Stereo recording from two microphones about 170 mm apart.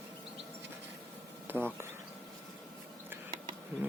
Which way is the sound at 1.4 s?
10° right (ahead or behind).